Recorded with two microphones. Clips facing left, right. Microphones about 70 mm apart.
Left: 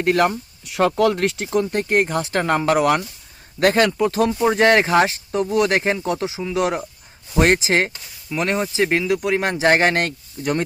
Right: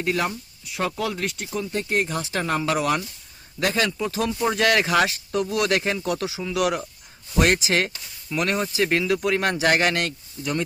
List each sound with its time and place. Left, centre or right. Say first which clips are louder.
0.0 s speech: left 7 dB; left
0.7 s speech: left 9 dB; left
1.6 s speech: left 5 dB; left
4.5 s speech: left 5 dB; left
8.3 s speech: left 3 dB; centre; by 10.6 s left